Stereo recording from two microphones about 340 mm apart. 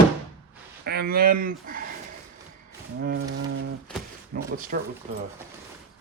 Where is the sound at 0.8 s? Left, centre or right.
Right.